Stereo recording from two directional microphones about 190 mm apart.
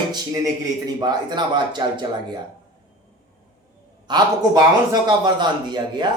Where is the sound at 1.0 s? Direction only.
20° right (ahead or behind).